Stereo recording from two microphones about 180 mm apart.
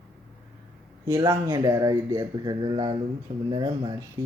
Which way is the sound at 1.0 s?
20° right (ahead or behind).